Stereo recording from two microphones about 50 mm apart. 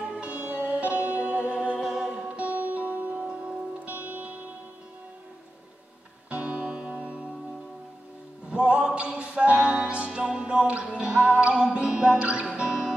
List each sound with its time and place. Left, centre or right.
0.0 s music: right
1.8 s music: centre
2.2 s music: right
3.2 s music: centre
3.9 s music: right
6.3 s music: right
8.5 s music: centre